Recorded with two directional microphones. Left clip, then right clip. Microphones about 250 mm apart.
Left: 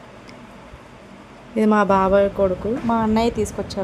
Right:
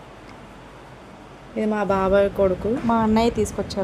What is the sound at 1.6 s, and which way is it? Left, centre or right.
Speech, centre.